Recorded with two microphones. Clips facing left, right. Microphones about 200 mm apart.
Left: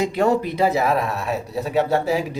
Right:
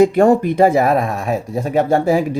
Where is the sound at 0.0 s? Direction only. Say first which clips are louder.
Right 8 dB; 50° right (ahead or behind).